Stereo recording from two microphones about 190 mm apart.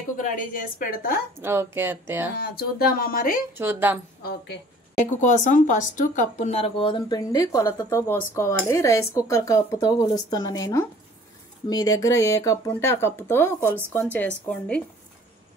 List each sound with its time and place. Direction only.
0.2 s a woman's voice: 45° left (ahead or behind)
1.4 s speech: 15° right (ahead or behind)
2.3 s a woman's voice: 55° left (ahead or behind)
3.5 s speech: 10° right (ahead or behind)
4.2 s a woman's voice: 55° left (ahead or behind)
4.9 s speech: 40° left (ahead or behind); by 14.8 s 5° left (ahead or behind)